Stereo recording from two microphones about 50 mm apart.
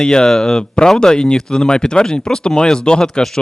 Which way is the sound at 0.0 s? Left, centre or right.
Centre.